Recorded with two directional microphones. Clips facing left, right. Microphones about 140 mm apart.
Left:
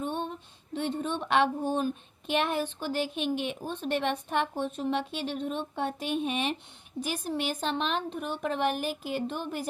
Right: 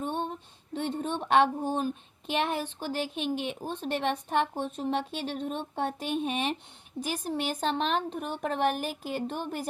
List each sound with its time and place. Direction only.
0.0 s female singing: 40° right (ahead or behind)
0.8 s a woman's voice: 40° right (ahead or behind)